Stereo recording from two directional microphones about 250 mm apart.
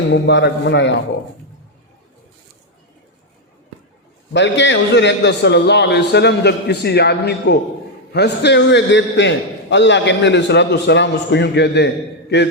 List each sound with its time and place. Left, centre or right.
0.1 s a man's voice: left
4.3 s a man's voice: left